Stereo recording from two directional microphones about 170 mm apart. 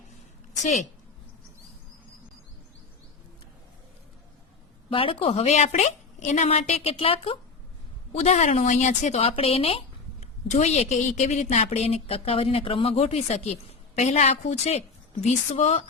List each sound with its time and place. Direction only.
0.6 s a woman's voice: 45° left (ahead or behind)
4.9 s a woman's voice: 30° left (ahead or behind)